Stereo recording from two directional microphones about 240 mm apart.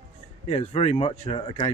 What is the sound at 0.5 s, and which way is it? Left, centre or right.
Speech, left.